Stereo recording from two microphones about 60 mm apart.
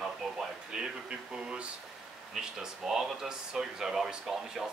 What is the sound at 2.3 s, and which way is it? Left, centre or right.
Speech, centre.